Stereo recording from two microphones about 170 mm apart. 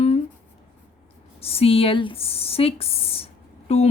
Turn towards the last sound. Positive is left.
turn(degrees=40)  # may be behind; listen again after turning